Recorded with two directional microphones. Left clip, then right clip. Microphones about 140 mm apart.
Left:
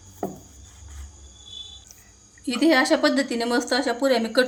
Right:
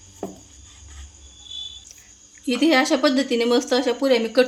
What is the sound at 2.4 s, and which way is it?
Speech, 30° right (ahead or behind).